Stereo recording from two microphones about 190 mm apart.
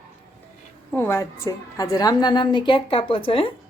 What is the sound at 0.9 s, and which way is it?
A woman's voice, 10° left (ahead or behind).